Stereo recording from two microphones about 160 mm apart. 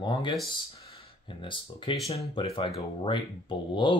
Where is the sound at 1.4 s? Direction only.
30° left (ahead or behind).